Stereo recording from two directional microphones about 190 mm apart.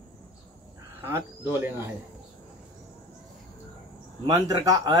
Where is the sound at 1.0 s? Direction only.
10° right (ahead or behind).